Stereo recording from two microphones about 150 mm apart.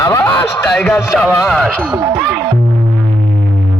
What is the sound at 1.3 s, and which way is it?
Speech, centre (ahead or behind).